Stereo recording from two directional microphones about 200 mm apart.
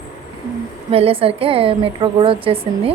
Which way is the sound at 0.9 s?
30° right (ahead or behind).